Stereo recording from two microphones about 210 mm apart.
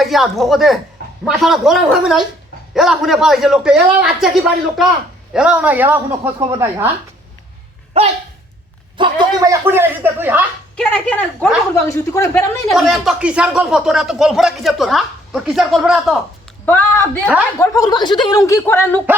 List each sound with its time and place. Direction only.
0.0 s a woman's voice: centre (ahead or behind)
7.9 s dog: 30° right (ahead or behind)
9.0 s speech: 20° right (ahead or behind)
11.3 s speech: 10° left (ahead or behind)
16.6 s speech: 10° left (ahead or behind)